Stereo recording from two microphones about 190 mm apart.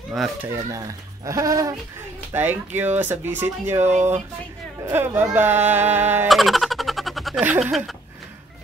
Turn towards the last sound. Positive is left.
turn(degrees=0)  # may be behind; listen again after turning